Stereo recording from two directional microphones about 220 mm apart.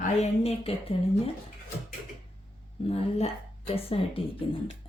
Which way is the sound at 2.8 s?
25° left (ahead or behind).